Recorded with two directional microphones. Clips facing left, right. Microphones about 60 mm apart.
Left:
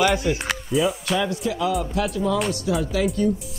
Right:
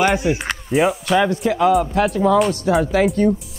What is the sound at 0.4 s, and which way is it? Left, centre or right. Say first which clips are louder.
Speech: right 4 dB; right.